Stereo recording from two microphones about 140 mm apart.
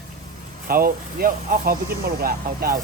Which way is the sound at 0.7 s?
90° right.